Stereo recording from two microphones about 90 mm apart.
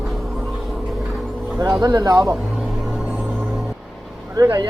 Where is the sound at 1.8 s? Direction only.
45° right (ahead or behind).